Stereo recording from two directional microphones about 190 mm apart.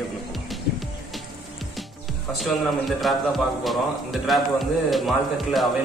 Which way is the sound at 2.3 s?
Centre (ahead or behind).